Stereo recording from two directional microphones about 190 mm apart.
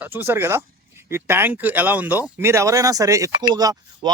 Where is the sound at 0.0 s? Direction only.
10° right (ahead or behind).